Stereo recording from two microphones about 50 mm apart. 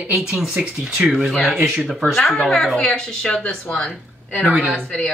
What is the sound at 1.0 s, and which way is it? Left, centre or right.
Speech, centre.